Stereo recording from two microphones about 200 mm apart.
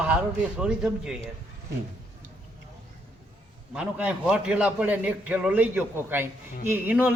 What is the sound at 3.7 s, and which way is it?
A man's voice, 5° right (ahead or behind).